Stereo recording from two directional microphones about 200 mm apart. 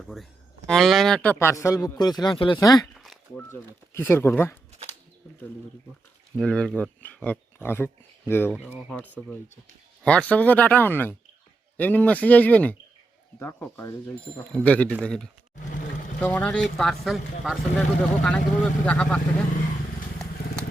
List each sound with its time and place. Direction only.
0.0 s a man's voice: centre (ahead or behind); by 2.8 s 15° left (ahead or behind)
2.8 s a sound: centre (ahead or behind)
3.5 s a man's voice: 10° left (ahead or behind)
6.3 s speech: 5° left (ahead or behind)
8.5 s speech: 5° right (ahead or behind)
8.9 s a man's voice: 5° left (ahead or behind)